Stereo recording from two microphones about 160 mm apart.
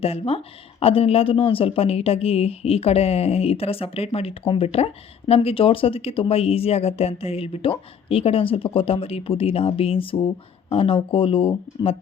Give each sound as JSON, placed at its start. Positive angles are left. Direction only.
{"t": 0.0, "sound": "speech", "side_deg": 40}